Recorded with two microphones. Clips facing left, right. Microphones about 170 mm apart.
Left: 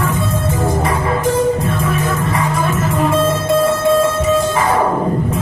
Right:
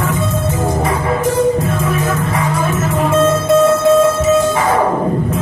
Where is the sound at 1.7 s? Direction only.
25° right (ahead or behind).